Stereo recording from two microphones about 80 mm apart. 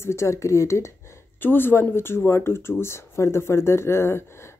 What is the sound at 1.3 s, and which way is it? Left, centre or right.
Speech, left.